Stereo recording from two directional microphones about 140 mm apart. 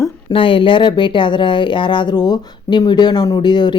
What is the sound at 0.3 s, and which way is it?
A woman's voice, 40° left (ahead or behind).